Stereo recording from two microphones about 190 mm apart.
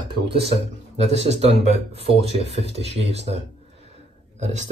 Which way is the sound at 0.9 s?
35° right (ahead or behind).